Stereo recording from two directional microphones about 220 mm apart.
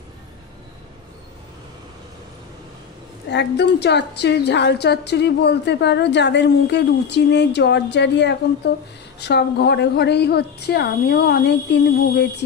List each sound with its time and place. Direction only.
3.3 s a woman's voice: 50° left (ahead or behind)